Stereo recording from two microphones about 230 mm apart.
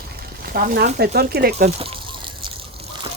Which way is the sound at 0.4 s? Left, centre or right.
Right.